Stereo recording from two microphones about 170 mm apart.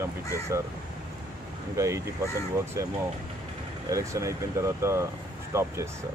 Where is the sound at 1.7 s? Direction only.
15° right (ahead or behind).